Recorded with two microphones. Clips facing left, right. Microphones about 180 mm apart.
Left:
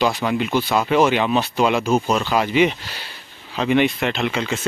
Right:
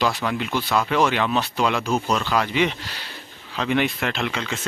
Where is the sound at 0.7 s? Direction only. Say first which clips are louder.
Left 2 dB; 20° left (ahead or behind).